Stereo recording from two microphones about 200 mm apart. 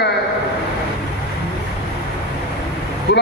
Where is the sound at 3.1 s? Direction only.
55° left (ahead or behind).